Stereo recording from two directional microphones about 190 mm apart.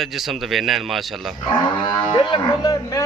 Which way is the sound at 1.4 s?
25° left (ahead or behind).